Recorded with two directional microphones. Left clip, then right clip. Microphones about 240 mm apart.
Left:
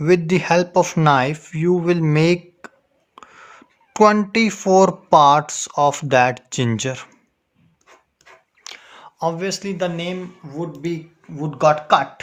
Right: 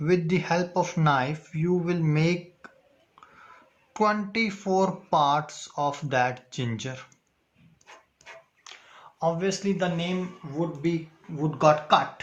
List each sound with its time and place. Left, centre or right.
0.0 s speech: left
8.6 s a sound: left
10.6 s speech: left